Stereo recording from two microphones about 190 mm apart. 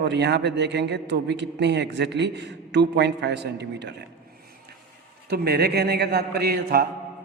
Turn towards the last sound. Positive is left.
turn(degrees=-55)  # may be behind; listen again after turning